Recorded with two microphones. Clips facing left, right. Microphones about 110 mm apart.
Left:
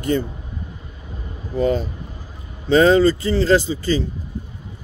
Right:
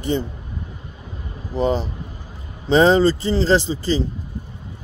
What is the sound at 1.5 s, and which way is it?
Speech, 25° right (ahead or behind).